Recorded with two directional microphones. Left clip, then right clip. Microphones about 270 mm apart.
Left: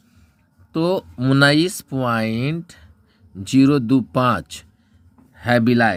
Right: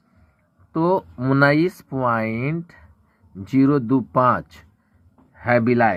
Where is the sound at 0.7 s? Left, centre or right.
Left.